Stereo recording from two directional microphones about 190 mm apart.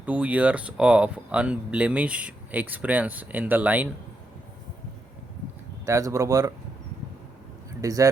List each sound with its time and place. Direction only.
0.0 s speech: 5° right (ahead or behind)
5.8 s speech: 15° right (ahead or behind)
7.8 s speech: 15° right (ahead or behind)